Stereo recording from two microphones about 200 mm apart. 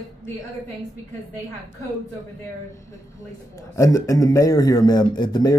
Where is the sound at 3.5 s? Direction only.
15° left (ahead or behind).